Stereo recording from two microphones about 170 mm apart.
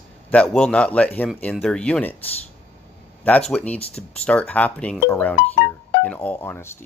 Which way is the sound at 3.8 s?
35° left (ahead or behind).